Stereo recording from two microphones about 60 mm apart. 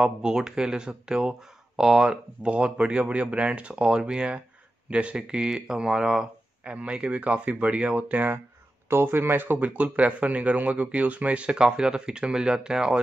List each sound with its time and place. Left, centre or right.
0.0 s speech: centre; by 8.4 s right
8.8 s speech: right; by 13.0 s centre